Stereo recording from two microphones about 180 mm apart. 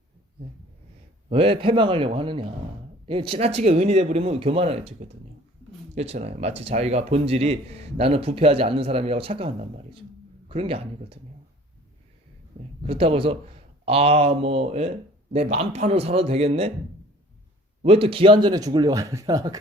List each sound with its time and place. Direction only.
1.3 s speech: 30° right (ahead or behind)
12.5 s speech: 30° right (ahead or behind)
17.8 s speech: 30° right (ahead or behind)